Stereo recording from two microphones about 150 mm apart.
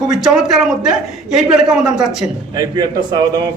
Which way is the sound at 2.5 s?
25° right (ahead or behind).